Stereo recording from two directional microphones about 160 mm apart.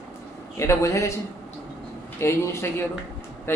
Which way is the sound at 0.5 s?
20° left (ahead or behind).